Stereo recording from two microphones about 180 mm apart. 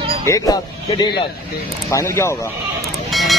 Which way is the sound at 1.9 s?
15° left (ahead or behind).